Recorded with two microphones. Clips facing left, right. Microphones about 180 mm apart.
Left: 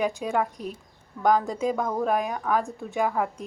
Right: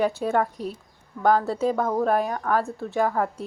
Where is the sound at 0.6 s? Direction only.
35° right (ahead or behind).